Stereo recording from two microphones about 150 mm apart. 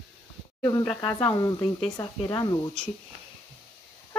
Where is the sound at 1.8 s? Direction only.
30° left (ahead or behind).